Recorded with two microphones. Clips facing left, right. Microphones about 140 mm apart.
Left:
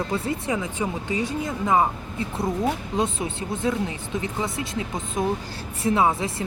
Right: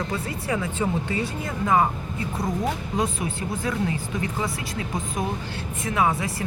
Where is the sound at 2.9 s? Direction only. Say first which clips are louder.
Left 1 dB; 25° left (ahead or behind).